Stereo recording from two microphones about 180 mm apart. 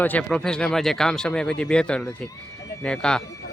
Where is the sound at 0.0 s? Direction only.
10° left (ahead or behind).